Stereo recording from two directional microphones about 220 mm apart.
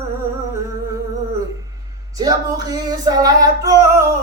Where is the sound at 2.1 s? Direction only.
15° right (ahead or behind).